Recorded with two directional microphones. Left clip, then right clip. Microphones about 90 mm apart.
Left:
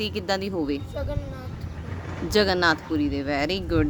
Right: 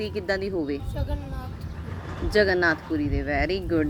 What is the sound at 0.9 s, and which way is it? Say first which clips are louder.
Speech: left 3 dB; centre (ahead or behind).